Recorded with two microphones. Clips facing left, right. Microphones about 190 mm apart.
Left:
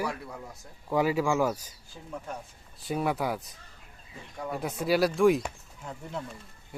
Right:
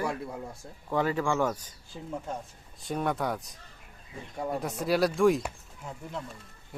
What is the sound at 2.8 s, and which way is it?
Speech, 5° left (ahead or behind).